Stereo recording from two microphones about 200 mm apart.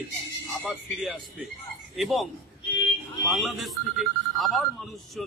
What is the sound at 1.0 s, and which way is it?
Speech, 5° right (ahead or behind).